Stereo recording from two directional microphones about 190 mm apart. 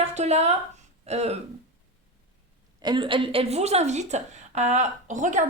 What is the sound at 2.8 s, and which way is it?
A woman's voice, 25° right (ahead or behind).